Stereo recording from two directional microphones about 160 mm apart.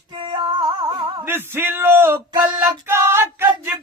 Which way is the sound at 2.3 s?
25° right (ahead or behind).